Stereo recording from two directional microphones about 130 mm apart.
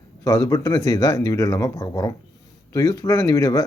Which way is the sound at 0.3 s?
25° left (ahead or behind).